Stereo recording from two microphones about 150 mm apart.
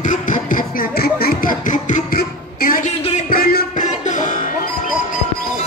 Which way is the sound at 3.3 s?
80° left.